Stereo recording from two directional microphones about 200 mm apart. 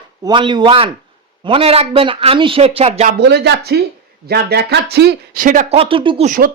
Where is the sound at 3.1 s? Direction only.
55° right (ahead or behind).